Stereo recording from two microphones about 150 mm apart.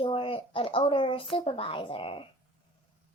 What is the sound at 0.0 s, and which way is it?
A child's voice, 35° left (ahead or behind).